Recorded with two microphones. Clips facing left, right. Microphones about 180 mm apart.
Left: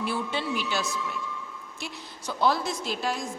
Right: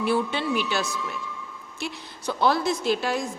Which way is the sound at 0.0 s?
65° right (ahead or behind).